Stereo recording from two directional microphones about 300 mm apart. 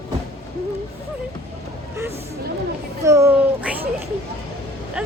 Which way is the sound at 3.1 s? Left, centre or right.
Centre.